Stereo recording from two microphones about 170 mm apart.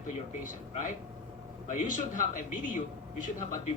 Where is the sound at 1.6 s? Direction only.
50° left (ahead or behind).